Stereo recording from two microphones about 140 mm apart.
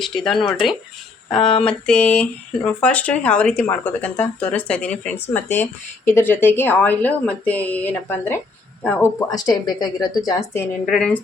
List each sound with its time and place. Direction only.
0.0 s speech: centre (ahead or behind)
9.3 s a woman's voice: 25° left (ahead or behind)
10.8 s speech: centre (ahead or behind)